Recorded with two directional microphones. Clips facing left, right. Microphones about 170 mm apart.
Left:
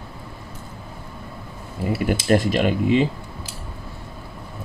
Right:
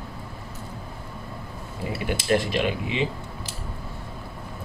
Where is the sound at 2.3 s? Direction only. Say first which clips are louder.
Left 4 dB; 45° left (ahead or behind).